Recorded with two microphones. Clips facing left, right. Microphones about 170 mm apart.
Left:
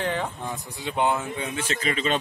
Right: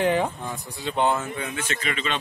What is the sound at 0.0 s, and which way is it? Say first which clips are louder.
Speech: right 6 dB; 15° right (ahead or behind).